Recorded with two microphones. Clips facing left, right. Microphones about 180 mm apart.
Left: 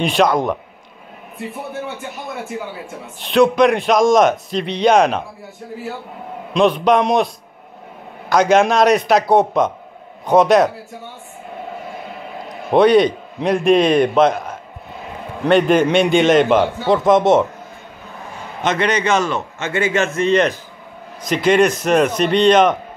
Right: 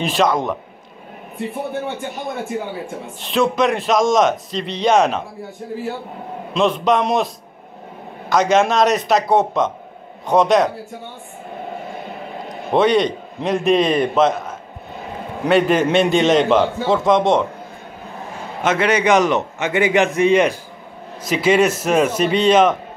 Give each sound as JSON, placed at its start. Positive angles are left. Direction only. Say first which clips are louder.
{"t": 0.0, "sound": "a man's voice", "louder": "left 2 dB", "side_deg": 0}
{"t": 3.2, "sound": "a man's voice", "louder": "left 5 dB", "side_deg": 0}
{"t": 6.5, "sound": "a man's voice", "louder": "left 3 dB", "side_deg": 0}
{"t": 8.3, "sound": "a man's voice", "louder": "left 2 dB", "side_deg": 0}
{"t": 12.7, "sound": "a man's voice", "louder": "left 4 dB", "side_deg": 0}
{"t": 15.4, "sound": "a man's voice", "louder": "left 2 dB", "side_deg": 0}
{"t": 18.6, "sound": "a man's voice", "louder": "right 1 dB", "side_deg": -5}